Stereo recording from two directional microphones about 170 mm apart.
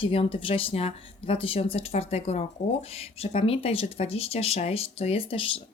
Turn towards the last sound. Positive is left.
turn(degrees=30)  # may be behind; listen again after turning